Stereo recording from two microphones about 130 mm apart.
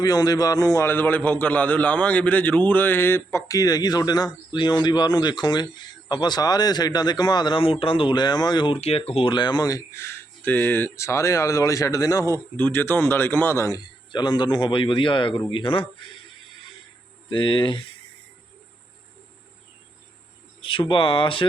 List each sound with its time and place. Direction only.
0.0 s a man's voice: 30° left (ahead or behind)
8.8 s a man's voice: 50° left (ahead or behind); by 12.4 s 25° left (ahead or behind)
12.5 s a man's voice: 15° left (ahead or behind)
14.1 s a man's voice: 35° left (ahead or behind)
17.2 s a man's voice: 40° left (ahead or behind)
20.6 s a man's voice: 40° left (ahead or behind)